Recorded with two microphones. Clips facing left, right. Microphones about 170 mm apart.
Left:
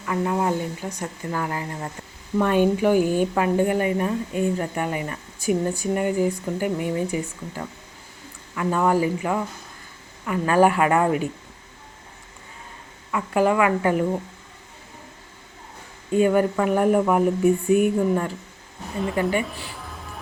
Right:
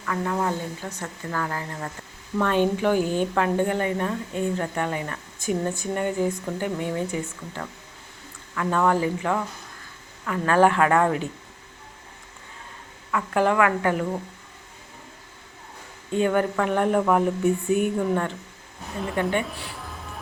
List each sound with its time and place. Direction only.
0.0 s speech: 15° left (ahead or behind)
13.1 s speech: 10° left (ahead or behind)
16.1 s speech: 10° left (ahead or behind)